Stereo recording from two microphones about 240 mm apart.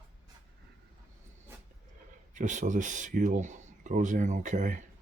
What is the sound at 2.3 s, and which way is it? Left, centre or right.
Speech, right.